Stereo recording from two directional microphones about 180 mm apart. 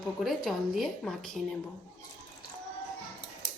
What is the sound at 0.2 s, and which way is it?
A woman's voice, centre (ahead or behind).